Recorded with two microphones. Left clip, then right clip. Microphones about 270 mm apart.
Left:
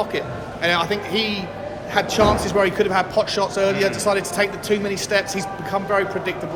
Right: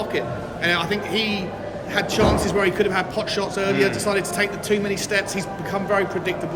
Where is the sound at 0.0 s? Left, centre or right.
Centre.